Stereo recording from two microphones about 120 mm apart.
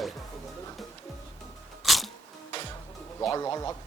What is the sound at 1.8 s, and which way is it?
Music, centre (ahead or behind).